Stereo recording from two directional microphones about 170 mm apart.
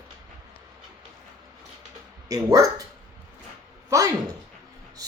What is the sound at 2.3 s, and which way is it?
Speech, 20° right (ahead or behind).